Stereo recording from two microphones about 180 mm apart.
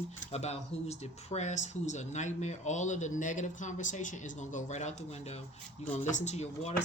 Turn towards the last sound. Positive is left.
turn(degrees=40)  # may be behind; listen again after turning